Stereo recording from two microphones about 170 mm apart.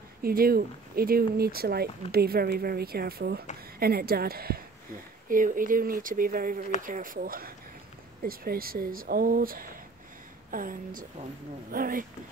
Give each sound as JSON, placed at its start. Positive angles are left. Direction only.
{"t": 0.2, "sound": "a woman's voice", "side_deg": -60}